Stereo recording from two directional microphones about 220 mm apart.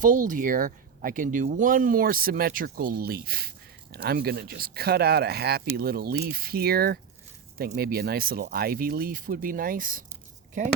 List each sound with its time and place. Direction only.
0.0 s speech: 35° right (ahead or behind)